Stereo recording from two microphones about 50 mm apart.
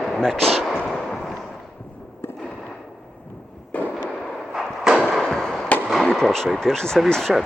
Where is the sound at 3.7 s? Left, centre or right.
Left.